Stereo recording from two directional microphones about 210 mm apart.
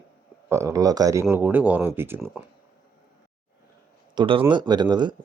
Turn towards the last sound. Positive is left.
turn(degrees=-20)  # may be behind; listen again after turning